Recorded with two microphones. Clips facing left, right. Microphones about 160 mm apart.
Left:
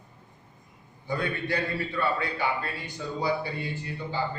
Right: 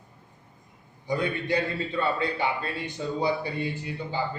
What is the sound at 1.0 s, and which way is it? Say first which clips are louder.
A man's voice: right 2 dB; 20° right (ahead or behind).